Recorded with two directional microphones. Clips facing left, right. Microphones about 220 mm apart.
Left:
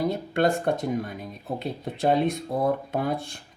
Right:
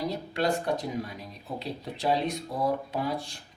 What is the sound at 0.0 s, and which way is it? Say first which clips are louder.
Speech: left 5 dB; 55° left (ahead or behind).